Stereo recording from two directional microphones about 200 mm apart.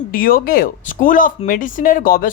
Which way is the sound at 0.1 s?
45° left (ahead or behind).